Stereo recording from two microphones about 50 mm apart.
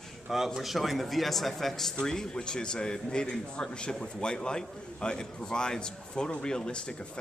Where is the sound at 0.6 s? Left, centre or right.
Centre.